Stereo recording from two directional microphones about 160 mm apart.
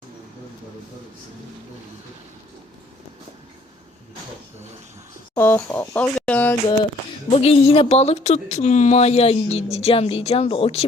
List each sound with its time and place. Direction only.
5.3 s speech: 15° left (ahead or behind)
7.3 s speech: 40° left (ahead or behind)